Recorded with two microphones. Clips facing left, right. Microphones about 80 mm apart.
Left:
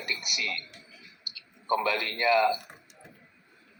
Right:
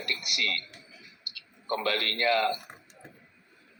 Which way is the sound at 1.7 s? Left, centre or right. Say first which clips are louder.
Left 2 dB; right.